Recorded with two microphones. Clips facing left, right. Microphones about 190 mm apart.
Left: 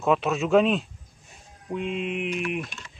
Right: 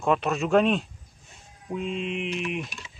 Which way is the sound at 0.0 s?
Centre (ahead or behind).